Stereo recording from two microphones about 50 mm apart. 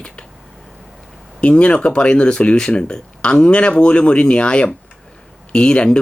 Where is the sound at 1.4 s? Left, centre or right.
Left.